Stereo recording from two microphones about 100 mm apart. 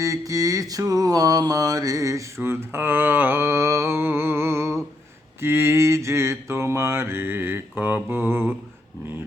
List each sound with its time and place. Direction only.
0.0 s mantra: 35° right (ahead or behind)